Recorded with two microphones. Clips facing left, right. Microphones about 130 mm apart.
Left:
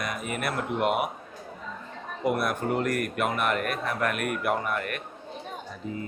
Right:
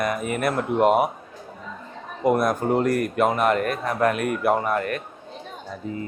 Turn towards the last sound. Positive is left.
turn(degrees=-35)  # may be behind; listen again after turning